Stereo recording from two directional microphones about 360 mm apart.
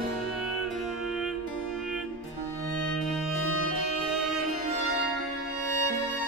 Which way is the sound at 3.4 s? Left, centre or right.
Right.